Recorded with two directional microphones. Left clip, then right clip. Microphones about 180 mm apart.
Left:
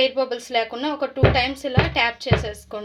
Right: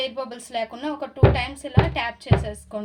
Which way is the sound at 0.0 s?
20° left (ahead or behind).